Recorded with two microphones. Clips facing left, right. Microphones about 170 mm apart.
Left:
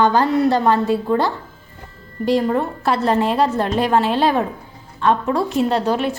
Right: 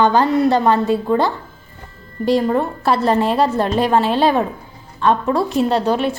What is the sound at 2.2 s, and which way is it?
A woman's voice, 30° right (ahead or behind).